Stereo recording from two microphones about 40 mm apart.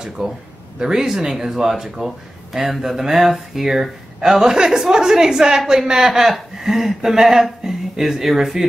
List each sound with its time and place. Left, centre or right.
0.2 s speech: centre